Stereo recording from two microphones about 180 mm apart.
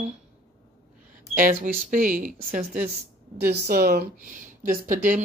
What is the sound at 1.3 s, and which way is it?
Speech, 50° right (ahead or behind).